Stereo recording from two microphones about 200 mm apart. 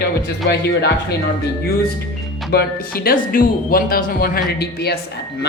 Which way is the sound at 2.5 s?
50° left (ahead or behind).